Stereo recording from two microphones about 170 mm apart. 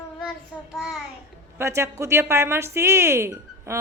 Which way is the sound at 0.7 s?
Centre (ahead or behind).